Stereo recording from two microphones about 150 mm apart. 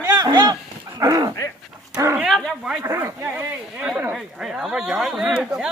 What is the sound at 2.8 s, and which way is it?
Speech, 20° right (ahead or behind).